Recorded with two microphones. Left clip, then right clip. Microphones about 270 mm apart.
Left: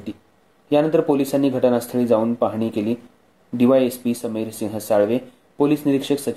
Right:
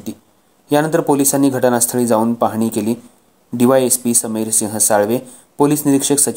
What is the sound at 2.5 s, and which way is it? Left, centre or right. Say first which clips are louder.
Speech: right 4 dB; right.